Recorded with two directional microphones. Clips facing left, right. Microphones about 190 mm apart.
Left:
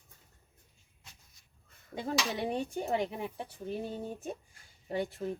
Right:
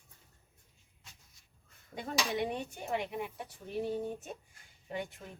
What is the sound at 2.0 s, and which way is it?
Speech, 30° left (ahead or behind).